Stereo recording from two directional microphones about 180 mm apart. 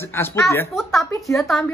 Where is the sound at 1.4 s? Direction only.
Centre (ahead or behind).